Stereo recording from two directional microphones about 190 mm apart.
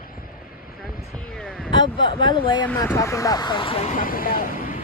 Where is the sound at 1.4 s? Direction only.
5° left (ahead or behind).